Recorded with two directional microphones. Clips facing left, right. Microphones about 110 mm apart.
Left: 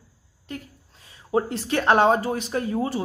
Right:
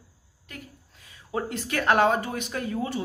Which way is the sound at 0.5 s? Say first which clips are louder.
Left 7 dB; 30° left (ahead or behind).